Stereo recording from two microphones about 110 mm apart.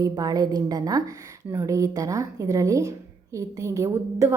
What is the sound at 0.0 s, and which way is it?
A woman's voice, 35° right (ahead or behind).